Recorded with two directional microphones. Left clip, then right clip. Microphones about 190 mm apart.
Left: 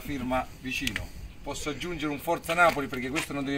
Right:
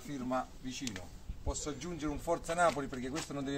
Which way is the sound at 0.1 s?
Centre (ahead or behind).